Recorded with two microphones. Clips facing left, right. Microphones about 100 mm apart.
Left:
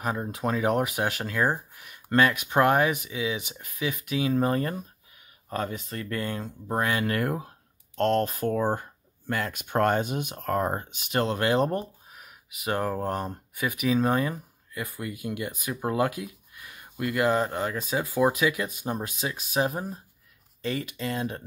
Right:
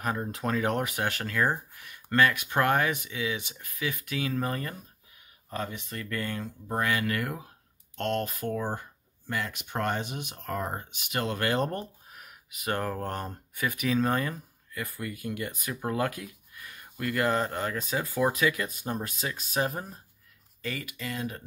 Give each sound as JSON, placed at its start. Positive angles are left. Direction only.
{"t": 0.0, "sound": "speech", "side_deg": 10}
{"t": 5.5, "sound": "speech", "side_deg": 45}
{"t": 6.1, "sound": "speech", "side_deg": 20}
{"t": 11.3, "sound": "speech", "side_deg": 20}
{"t": 20.6, "sound": "speech", "side_deg": 25}